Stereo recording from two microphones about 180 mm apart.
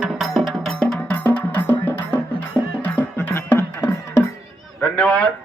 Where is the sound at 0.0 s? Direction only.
Centre (ahead or behind); by 4.3 s 15° left (ahead or behind).